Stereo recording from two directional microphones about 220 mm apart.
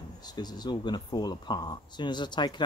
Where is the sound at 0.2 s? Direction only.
20° left (ahead or behind).